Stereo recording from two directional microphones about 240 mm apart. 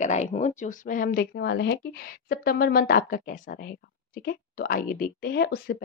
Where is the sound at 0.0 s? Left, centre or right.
Left.